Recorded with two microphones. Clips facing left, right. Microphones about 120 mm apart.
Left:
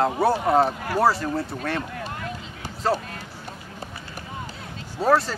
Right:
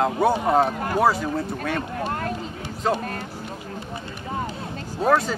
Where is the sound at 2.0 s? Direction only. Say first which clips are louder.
Right 6 dB; 45° right (ahead or behind).